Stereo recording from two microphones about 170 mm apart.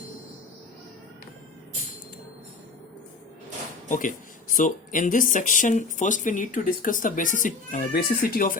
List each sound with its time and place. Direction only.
3.8 s speech: 50° left (ahead or behind)